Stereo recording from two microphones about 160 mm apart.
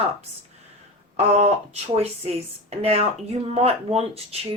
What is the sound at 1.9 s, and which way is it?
Speech, 40° right (ahead or behind).